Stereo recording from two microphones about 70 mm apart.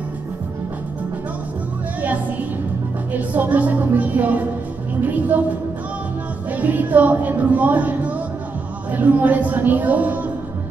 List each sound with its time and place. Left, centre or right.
3.1 s speech: right
6.5 s speech: right